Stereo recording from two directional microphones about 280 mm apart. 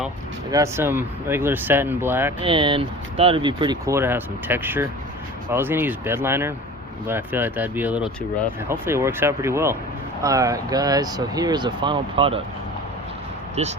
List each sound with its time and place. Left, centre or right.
0.5 s speech: centre
13.6 s speech: right